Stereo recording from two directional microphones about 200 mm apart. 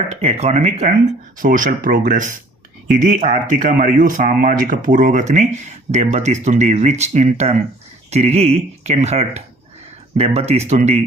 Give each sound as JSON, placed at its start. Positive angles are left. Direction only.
{"t": 0.1, "sound": "speech", "side_deg": -30}